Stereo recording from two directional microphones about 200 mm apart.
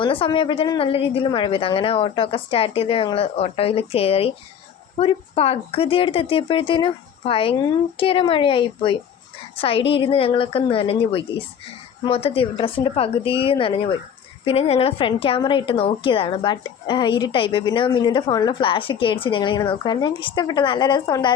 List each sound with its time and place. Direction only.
0.0 s a woman's voice: 25° left (ahead or behind)